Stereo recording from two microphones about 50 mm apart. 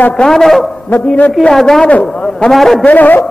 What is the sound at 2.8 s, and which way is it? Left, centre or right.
Speech, left.